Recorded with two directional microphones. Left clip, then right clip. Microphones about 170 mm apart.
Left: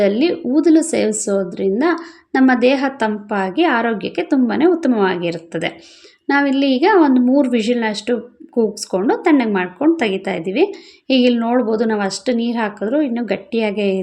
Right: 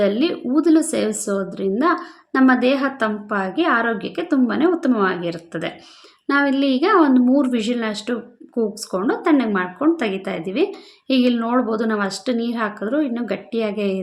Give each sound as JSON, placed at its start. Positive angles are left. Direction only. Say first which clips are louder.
{"t": 0.0, "sound": "a woman's voice", "louder": "left 3 dB", "side_deg": 20}